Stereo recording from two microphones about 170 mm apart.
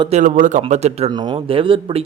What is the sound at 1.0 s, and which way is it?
Speech, 25° right (ahead or behind).